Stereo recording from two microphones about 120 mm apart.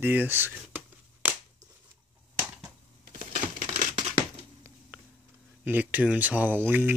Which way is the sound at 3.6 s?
90° right.